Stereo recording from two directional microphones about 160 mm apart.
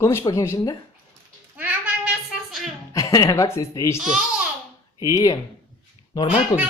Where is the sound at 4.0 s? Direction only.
5° right (ahead or behind).